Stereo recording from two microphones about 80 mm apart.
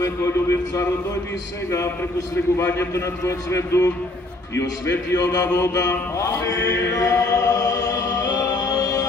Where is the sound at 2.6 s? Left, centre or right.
Left.